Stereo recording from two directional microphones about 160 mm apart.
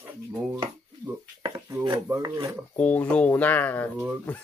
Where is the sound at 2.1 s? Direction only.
20° right (ahead or behind).